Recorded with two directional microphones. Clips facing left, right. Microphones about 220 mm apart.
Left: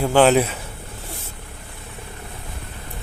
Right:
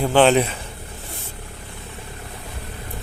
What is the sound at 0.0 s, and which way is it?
Speech, 10° left (ahead or behind).